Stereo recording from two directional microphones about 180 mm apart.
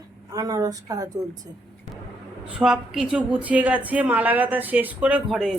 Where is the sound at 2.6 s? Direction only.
5° right (ahead or behind).